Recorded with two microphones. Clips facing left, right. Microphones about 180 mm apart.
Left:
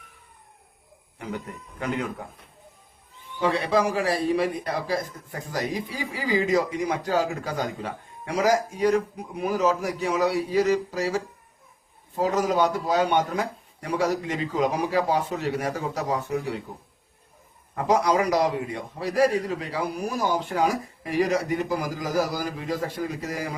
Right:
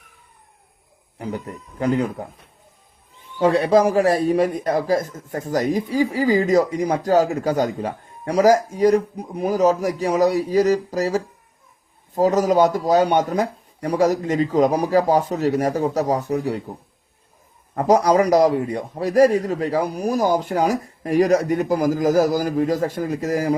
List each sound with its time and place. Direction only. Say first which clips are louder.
1.8 s a man's voice: right 8 dB; 35° right (ahead or behind)
3.4 s a man's voice: right 7 dB; 45° right (ahead or behind)
17.7 s a man's voice: right 6 dB; 40° right (ahead or behind)